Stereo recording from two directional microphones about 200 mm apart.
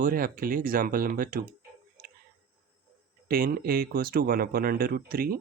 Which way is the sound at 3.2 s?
45° right (ahead or behind).